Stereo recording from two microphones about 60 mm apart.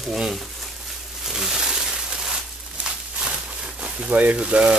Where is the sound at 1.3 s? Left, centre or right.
Centre.